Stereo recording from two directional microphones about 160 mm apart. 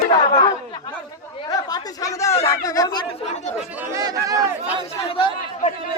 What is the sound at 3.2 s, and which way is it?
Speech, 45° left (ahead or behind).